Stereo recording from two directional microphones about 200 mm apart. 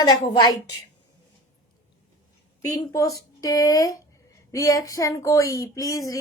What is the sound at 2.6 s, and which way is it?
A woman's voice, 15° left (ahead or behind).